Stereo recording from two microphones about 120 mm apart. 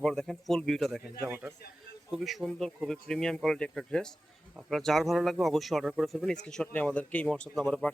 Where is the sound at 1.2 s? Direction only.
10° right (ahead or behind).